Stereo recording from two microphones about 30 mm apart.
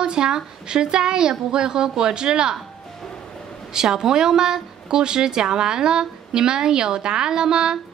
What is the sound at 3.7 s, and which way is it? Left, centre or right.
A woman's voice, centre.